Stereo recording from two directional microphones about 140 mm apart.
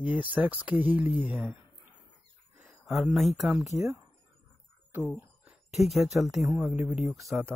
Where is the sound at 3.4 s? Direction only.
5° right (ahead or behind).